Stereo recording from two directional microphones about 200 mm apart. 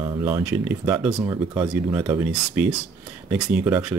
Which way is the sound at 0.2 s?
10° right (ahead or behind).